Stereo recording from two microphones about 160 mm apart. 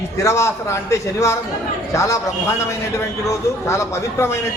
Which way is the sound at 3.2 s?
20° left (ahead or behind).